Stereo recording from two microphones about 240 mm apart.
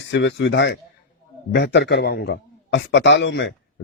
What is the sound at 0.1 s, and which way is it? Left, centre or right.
Speech, left.